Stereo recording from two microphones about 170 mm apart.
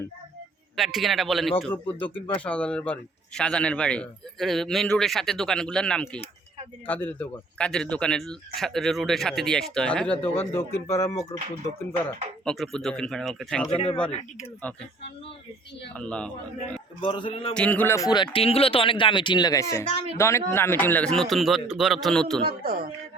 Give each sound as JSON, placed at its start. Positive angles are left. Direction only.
{"t": 0.8, "sound": "a man's voice", "side_deg": 0}
{"t": 10.2, "sound": "a man's voice", "side_deg": 35}
{"t": 10.8, "sound": "speech", "side_deg": 15}
{"t": 11.9, "sound": "a man's voice", "side_deg": 10}
{"t": 13.7, "sound": "a man's voice", "side_deg": 35}
{"t": 16.0, "sound": "speech", "side_deg": 5}
{"t": 17.0, "sound": "a man's voice", "side_deg": 30}
{"t": 17.5, "sound": "speech", "side_deg": 10}
{"t": 22.6, "sound": "speech", "side_deg": -60}